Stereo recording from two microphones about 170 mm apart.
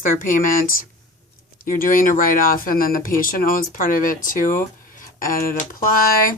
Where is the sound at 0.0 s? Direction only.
50° left (ahead or behind).